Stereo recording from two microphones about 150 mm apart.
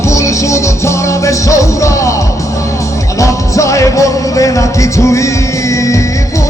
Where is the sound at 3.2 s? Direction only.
20° left (ahead or behind).